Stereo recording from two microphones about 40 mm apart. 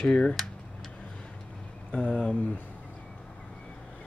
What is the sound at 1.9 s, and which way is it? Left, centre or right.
Speech, left.